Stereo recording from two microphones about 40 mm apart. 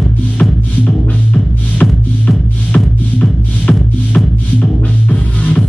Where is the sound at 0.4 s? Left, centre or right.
Left.